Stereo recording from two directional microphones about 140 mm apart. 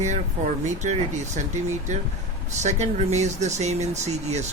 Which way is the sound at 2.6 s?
55° right (ahead or behind).